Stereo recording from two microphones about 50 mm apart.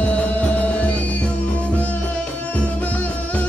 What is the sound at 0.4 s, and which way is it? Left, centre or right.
Music, left.